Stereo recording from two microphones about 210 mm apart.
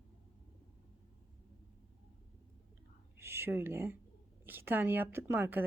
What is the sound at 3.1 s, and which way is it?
Speech, 10° right (ahead or behind).